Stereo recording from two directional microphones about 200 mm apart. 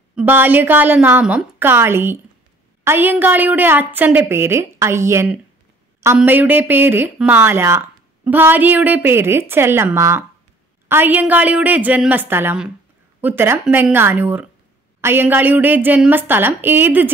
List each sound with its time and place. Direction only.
0.1 s a woman's voice: 10° right (ahead or behind)